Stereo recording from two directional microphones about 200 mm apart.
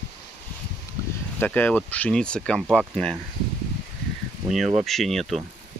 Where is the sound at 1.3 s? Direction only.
10° left (ahead or behind).